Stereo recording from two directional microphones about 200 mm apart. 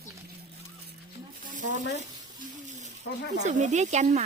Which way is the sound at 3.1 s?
65° left (ahead or behind).